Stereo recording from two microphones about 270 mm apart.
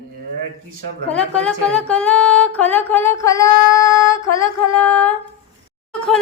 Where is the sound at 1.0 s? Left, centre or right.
Centre.